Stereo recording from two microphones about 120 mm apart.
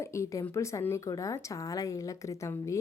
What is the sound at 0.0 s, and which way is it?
Speech, 25° left (ahead or behind).